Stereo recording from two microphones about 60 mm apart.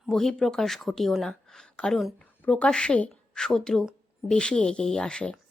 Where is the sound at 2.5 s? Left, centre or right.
Centre.